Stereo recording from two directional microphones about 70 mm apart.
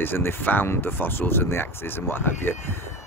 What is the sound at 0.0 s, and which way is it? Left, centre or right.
Speech, left.